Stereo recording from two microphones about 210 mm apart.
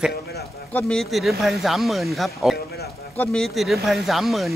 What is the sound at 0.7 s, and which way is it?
Speech, 5° left (ahead or behind).